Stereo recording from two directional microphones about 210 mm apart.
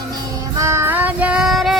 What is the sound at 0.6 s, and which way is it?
Child singing, 15° right (ahead or behind).